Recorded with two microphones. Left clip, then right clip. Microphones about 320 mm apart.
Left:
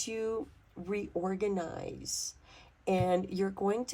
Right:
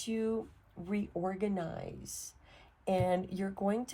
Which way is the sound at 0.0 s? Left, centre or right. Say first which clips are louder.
Left 1 dB; left.